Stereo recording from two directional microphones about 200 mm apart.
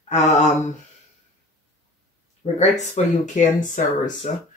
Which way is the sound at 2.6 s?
40° left (ahead or behind).